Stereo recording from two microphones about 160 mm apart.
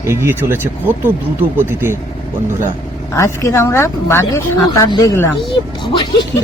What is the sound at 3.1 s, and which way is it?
Speech, 20° left (ahead or behind).